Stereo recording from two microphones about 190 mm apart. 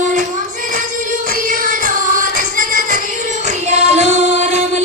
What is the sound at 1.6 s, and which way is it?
Music, 45° right (ahead or behind).